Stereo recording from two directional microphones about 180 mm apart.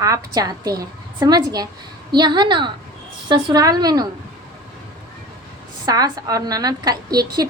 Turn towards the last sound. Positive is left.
turn(degrees=-20)  # may be behind; listen again after turning